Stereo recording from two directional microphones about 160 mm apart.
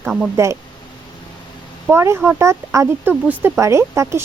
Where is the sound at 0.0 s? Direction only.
5° right (ahead or behind).